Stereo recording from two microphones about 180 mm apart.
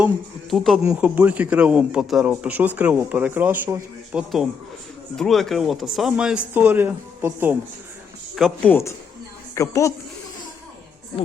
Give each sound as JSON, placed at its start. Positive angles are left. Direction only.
{"t": 0.5, "sound": "speech", "side_deg": 0}
{"t": 8.4, "sound": "speech", "side_deg": 5}